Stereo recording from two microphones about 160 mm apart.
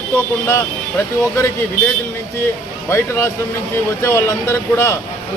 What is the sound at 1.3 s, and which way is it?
Speech, 15° left (ahead or behind).